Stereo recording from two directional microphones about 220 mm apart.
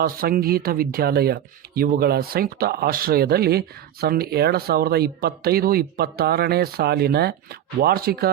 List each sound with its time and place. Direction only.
0.0 s speech: 40° right (ahead or behind)